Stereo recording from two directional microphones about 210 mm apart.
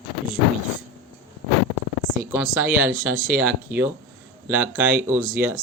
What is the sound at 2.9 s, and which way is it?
Speech, 40° right (ahead or behind).